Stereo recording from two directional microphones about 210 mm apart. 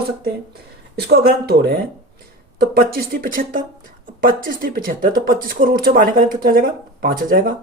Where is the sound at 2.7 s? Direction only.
45° right (ahead or behind).